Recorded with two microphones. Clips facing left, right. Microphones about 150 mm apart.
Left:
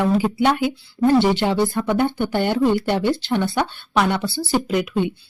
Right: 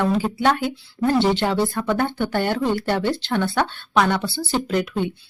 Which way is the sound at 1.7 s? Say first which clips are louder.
Left 2 dB; 15° left (ahead or behind).